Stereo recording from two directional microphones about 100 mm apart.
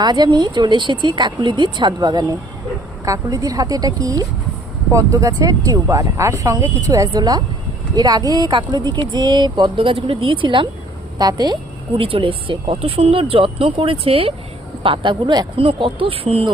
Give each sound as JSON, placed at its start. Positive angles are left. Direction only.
{"t": 0.0, "sound": "speech", "side_deg": -45}
{"t": 3.0, "sound": "speech", "side_deg": -35}
{"t": 7.1, "sound": "speech", "side_deg": -45}
{"t": 11.2, "sound": "speech", "side_deg": -40}
{"t": 11.9, "sound": "speech", "side_deg": -65}
{"t": 14.8, "sound": "speech", "side_deg": -55}
{"t": 15.5, "sound": "speech", "side_deg": -65}